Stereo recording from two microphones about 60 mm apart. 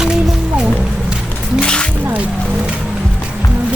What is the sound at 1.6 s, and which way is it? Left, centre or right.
Music, centre.